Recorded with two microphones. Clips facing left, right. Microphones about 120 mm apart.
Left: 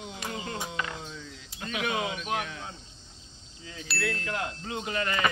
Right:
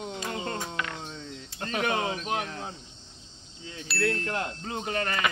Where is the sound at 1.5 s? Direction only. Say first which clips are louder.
Right 2 dB; 45° right (ahead or behind).